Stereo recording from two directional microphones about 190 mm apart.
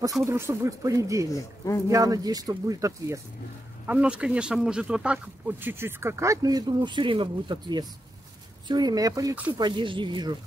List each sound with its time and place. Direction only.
0.2 s speech: 15° right (ahead or behind)
3.8 s speech: 5° right (ahead or behind)
9.5 s speech: 25° right (ahead or behind)